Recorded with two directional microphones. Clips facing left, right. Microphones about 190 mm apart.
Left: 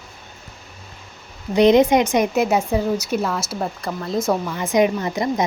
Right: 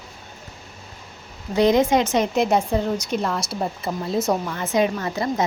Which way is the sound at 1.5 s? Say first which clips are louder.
Left 4 dB; 20° left (ahead or behind).